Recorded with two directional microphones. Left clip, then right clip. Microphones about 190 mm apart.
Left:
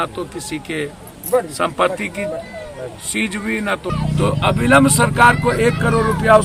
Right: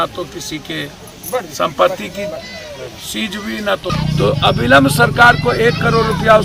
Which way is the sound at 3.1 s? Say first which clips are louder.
Left 2 dB; 20° left (ahead or behind).